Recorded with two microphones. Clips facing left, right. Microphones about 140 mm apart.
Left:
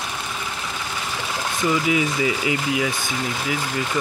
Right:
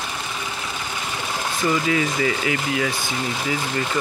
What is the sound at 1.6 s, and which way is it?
Speech, 10° left (ahead or behind).